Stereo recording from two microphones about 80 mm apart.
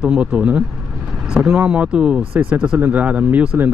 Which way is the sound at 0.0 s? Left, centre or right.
Centre.